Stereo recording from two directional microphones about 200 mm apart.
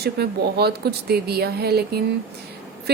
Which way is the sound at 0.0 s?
55° right (ahead or behind).